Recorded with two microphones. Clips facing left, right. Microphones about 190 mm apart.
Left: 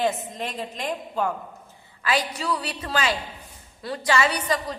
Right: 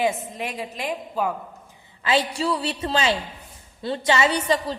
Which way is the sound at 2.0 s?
25° right (ahead or behind).